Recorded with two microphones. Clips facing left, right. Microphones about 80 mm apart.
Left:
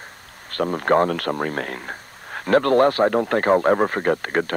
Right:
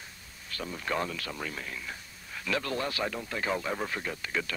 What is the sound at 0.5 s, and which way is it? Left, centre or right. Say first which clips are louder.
Speech: left 15 dB; left.